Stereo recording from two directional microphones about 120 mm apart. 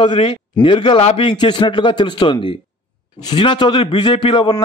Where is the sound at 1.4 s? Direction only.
40° left (ahead or behind).